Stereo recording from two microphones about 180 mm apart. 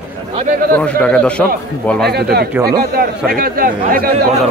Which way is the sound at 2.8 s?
55° right (ahead or behind).